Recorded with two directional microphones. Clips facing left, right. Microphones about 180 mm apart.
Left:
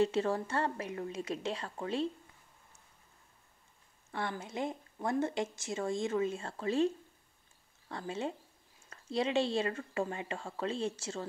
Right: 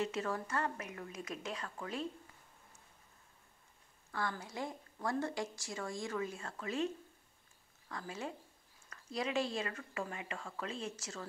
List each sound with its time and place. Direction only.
0.0 s a woman's voice: 30° left (ahead or behind)
4.1 s a woman's voice: 25° left (ahead or behind)
7.9 s a woman's voice: 25° left (ahead or behind)